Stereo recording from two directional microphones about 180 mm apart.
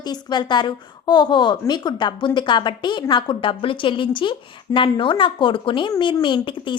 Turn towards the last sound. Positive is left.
turn(degrees=25)  # may be behind; listen again after turning